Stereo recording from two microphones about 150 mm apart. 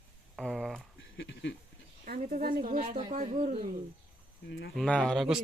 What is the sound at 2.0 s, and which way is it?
Speech, 65° right (ahead or behind).